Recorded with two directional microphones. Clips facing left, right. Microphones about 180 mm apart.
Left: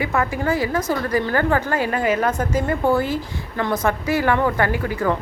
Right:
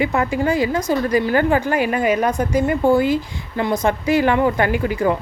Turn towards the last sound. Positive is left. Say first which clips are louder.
# right 3 dB
turn(degrees=-15)  # may be behind; listen again after turning